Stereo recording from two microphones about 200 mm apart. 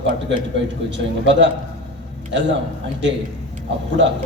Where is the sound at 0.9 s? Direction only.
65° right (ahead or behind).